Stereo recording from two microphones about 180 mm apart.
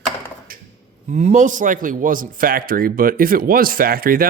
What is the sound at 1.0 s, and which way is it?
A man's voice, 40° right (ahead or behind).